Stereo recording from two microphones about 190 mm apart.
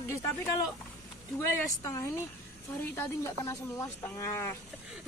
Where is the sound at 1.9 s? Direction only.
15° left (ahead or behind).